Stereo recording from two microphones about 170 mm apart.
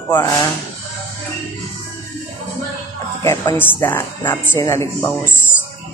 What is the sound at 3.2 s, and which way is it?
A woman's voice, 15° left (ahead or behind).